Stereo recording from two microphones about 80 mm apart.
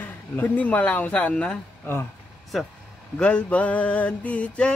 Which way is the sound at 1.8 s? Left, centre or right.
Left.